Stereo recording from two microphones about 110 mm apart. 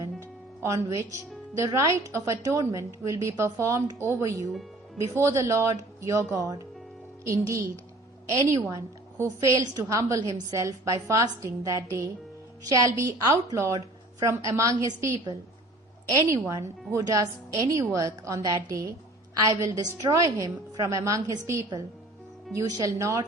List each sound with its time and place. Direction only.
0.6 s a woman's voice: 30° right (ahead or behind)